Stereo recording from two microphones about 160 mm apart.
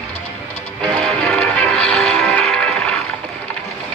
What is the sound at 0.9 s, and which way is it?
Music, centre (ahead or behind).